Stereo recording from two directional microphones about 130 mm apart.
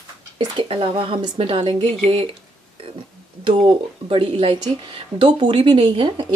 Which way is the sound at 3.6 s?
40° right (ahead or behind).